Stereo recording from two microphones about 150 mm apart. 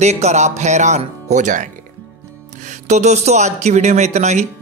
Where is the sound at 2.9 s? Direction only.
50° right (ahead or behind).